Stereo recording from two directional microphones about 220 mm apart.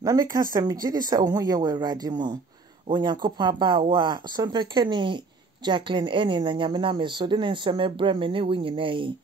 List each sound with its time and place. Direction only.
0.0 s speech: 15° right (ahead or behind)